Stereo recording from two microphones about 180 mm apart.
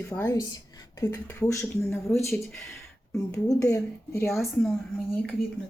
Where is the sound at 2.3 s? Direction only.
Centre (ahead or behind).